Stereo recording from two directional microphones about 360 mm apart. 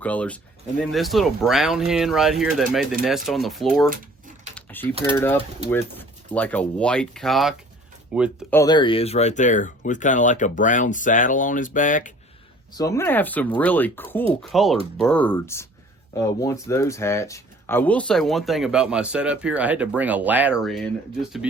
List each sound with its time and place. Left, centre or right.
0.0 s speech: centre
4.5 s typing: centre
5.0 s speech: centre; by 12.1 s left
12.7 s speech: centre